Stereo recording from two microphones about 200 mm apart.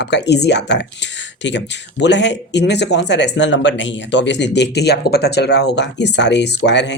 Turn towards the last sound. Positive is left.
turn(degrees=60)  # may be behind; listen again after turning